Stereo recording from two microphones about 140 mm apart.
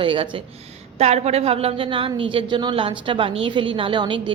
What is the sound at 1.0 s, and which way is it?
Speech, 50° right (ahead or behind).